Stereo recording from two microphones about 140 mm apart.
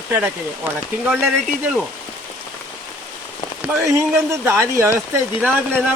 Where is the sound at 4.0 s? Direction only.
20° right (ahead or behind).